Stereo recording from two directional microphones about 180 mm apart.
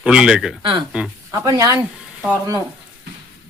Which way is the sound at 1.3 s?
20° right (ahead or behind).